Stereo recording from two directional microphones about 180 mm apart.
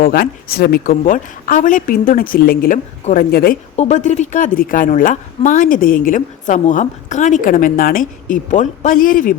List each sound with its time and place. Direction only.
0.0 s a woman's voice: 55° left (ahead or behind)
3.8 s a woman's voice: 40° left (ahead or behind)